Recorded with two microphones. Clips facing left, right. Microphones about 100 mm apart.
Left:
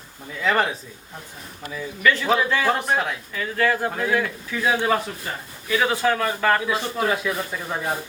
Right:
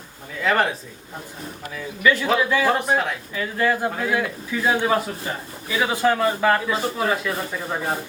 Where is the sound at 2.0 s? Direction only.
15° right (ahead or behind).